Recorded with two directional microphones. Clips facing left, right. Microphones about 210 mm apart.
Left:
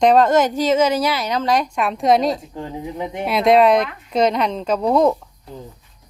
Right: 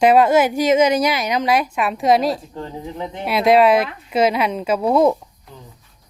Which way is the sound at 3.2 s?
Centre (ahead or behind).